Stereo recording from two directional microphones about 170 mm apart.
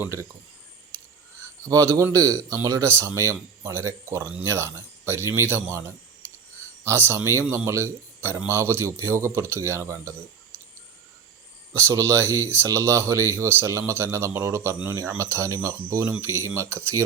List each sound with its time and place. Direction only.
0.0 s speech: 15° right (ahead or behind)
1.6 s speech: 15° right (ahead or behind)
11.9 s speech: 15° right (ahead or behind)